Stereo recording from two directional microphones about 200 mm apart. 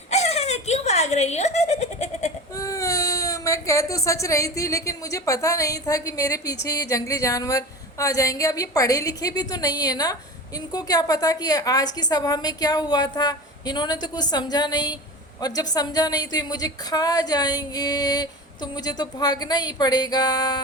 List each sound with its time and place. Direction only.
0.1 s giggle: 35° left (ahead or behind)
2.6 s a woman's voice: 15° left (ahead or behind)